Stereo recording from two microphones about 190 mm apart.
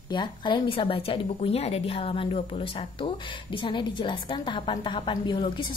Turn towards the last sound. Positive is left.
turn(degrees=25)  # may be behind; listen again after turning